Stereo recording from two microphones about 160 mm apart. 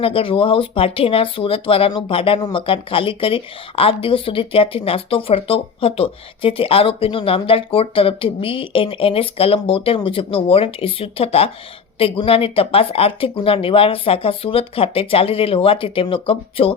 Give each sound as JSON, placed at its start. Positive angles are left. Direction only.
{"t": 0.0, "sound": "speech", "side_deg": 35}